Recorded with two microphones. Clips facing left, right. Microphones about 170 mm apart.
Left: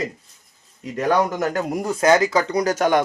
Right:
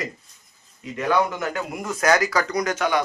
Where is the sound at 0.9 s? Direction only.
40° left (ahead or behind).